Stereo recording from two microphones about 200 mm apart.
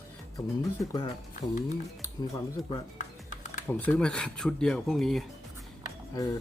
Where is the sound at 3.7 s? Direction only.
5° left (ahead or behind).